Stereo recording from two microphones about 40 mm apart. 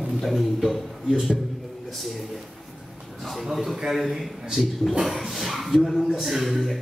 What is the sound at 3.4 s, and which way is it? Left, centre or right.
A man's voice, centre.